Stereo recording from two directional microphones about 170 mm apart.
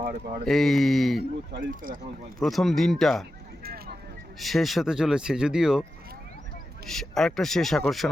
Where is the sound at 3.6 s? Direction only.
65° right (ahead or behind).